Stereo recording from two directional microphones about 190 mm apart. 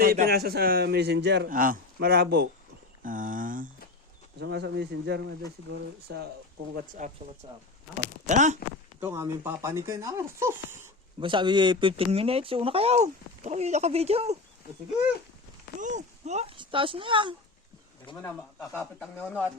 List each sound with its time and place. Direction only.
0.0 s a man's voice: 55° right (ahead or behind)
1.5 s speech: 45° right (ahead or behind)
3.0 s speech: 45° right (ahead or behind)
4.4 s a man's voice: 65° right (ahead or behind)
6.7 s speech: 45° right (ahead or behind)
7.4 s speech: 30° right (ahead or behind)
8.3 s speech: 40° right (ahead or behind)
9.0 s speech: 15° right (ahead or behind)
11.2 s speech: 25° right (ahead or behind)
15.8 s speech: 40° right (ahead or behind)
18.1 s speech: 25° left (ahead or behind)
18.7 s speech: 5° left (ahead or behind)